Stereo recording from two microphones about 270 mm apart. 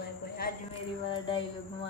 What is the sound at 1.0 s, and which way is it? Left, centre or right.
Speech, centre.